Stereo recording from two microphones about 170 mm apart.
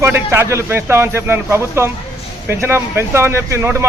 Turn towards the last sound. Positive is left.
turn(degrees=-15)  # may be behind; listen again after turning